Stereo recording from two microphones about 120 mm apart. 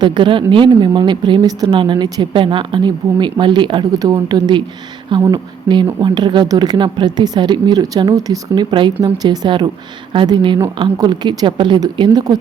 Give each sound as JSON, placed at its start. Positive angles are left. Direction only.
{"t": 0.0, "sound": "a woman's voice", "side_deg": -40}